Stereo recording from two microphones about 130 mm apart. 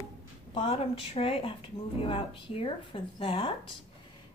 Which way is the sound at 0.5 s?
45° left (ahead or behind).